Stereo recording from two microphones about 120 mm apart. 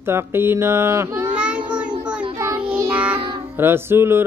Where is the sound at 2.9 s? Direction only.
10° right (ahead or behind).